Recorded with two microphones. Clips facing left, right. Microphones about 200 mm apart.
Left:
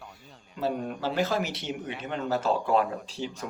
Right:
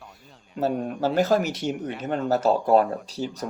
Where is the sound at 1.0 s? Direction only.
45° right (ahead or behind).